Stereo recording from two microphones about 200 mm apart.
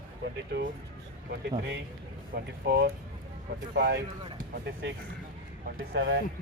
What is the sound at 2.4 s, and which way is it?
Speech, 55° right (ahead or behind).